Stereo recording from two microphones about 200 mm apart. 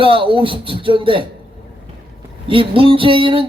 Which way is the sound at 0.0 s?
25° right (ahead or behind).